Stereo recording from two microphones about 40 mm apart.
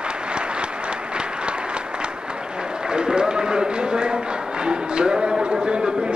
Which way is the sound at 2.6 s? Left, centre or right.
Right.